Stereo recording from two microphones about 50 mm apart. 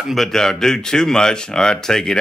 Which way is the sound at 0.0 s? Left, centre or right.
Centre.